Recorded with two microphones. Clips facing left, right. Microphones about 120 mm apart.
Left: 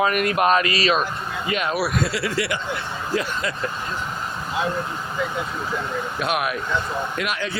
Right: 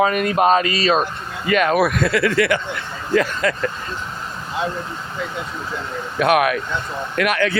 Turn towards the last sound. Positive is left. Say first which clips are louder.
# right 7 dB
turn(degrees=-60)  # may be behind; listen again after turning